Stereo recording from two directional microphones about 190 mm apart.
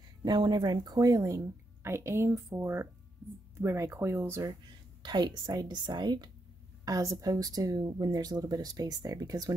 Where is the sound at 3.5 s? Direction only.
15° right (ahead or behind).